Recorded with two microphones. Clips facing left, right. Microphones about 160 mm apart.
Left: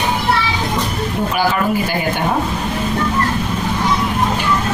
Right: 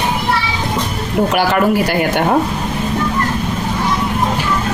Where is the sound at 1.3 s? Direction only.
70° right (ahead or behind).